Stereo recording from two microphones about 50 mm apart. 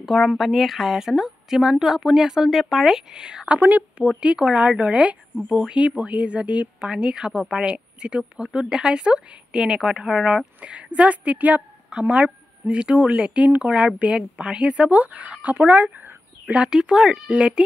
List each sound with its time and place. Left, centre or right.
0.0 s a woman's voice: centre
3.5 s a woman's voice: right
6.8 s a woman's voice: centre
14.1 s a woman's voice: centre
14.7 s speech: right
16.6 s a woman's voice: centre